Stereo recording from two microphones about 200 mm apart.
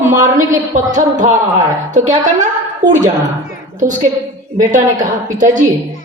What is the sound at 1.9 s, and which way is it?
A woman's voice, 35° right (ahead or behind).